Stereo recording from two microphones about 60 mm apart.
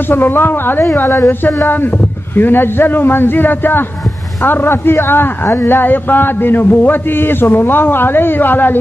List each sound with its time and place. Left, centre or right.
0.1 s a man's voice: left